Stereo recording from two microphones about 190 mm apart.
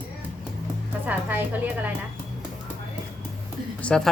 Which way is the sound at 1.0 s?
10° right (ahead or behind).